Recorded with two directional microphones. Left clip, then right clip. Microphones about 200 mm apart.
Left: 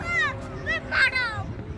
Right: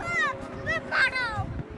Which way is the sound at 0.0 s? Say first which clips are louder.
Left 2 dB; 20° right (ahead or behind).